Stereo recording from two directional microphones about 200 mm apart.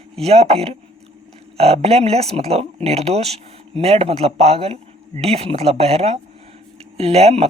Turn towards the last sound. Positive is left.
turn(degrees=-30)  # may be behind; listen again after turning